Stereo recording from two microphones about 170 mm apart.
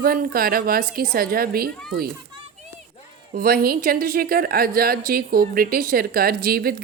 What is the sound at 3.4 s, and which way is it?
A woman's voice, 60° right (ahead or behind).